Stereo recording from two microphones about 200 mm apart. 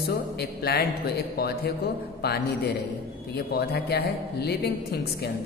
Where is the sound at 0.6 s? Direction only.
50° left (ahead or behind).